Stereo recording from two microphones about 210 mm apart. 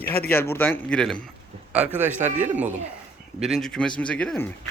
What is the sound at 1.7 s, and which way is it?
A man's voice, 10° right (ahead or behind).